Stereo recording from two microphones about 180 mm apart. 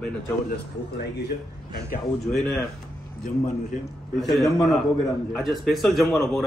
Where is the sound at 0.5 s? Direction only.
65° left (ahead or behind).